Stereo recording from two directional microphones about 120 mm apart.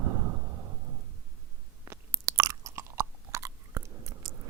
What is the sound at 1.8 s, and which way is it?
Chewing, 25° right (ahead or behind).